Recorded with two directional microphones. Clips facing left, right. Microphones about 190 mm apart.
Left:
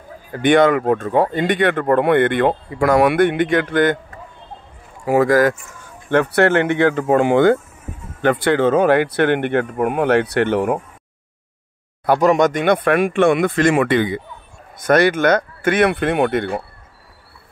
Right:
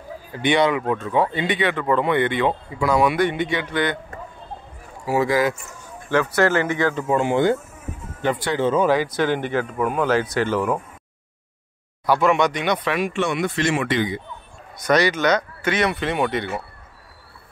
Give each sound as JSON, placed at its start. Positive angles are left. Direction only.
{"t": 0.3, "sound": "speech", "side_deg": 50}
{"t": 5.0, "sound": "speech", "side_deg": 50}
{"t": 6.0, "sound": "speech", "side_deg": 60}
{"t": 12.2, "sound": "speech", "side_deg": 40}